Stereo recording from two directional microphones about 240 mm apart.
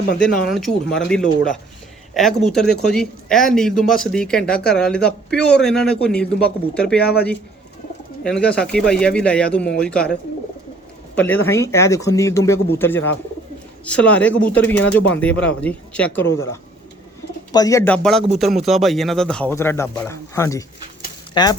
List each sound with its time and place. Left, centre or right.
0.3 s speech: centre
8.2 s speech: centre
17.5 s speech: centre